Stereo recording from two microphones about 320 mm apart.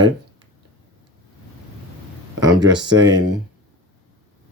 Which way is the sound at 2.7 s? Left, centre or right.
Right.